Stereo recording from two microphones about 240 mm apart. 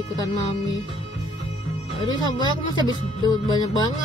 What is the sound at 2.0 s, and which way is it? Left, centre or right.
Music, centre.